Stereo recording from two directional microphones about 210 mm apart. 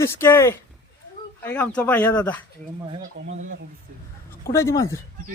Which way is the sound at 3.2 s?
65° right (ahead or behind).